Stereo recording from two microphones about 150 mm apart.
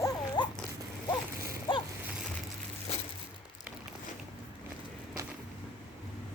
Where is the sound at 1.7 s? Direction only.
30° left (ahead or behind).